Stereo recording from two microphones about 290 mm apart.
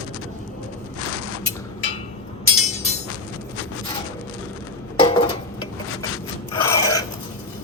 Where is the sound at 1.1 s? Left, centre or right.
Right.